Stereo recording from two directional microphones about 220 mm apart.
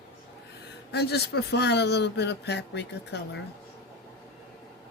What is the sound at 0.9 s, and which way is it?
Speech, 45° left (ahead or behind).